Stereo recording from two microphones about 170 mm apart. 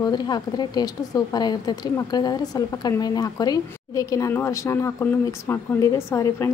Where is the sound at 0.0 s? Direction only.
25° left (ahead or behind).